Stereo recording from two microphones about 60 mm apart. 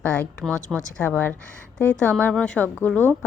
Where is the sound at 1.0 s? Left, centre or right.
Left.